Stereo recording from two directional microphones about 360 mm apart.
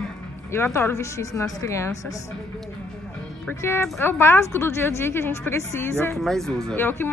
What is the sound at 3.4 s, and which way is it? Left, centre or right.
A woman's voice, centre.